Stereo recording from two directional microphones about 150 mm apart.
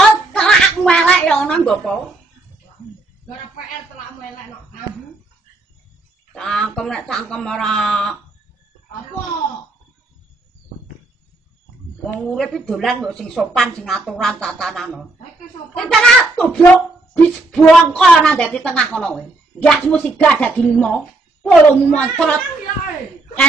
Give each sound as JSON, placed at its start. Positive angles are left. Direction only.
{"t": 0.3, "sound": "a sound", "side_deg": 5}
{"t": 6.3, "sound": "a woman's voice", "side_deg": 5}
{"t": 12.2, "sound": "a woman's voice", "side_deg": 0}